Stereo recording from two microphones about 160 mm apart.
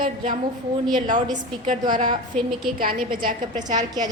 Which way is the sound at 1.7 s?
55° right (ahead or behind).